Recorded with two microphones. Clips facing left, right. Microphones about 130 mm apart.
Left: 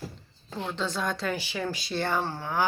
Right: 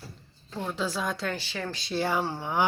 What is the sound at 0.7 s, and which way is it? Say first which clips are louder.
Speech: even; 5° right (ahead or behind).